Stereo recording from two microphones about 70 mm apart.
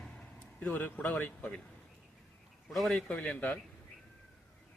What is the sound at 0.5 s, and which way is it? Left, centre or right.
Speech, left.